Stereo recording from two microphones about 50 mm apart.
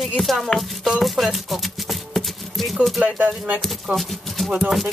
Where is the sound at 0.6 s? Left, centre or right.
Centre.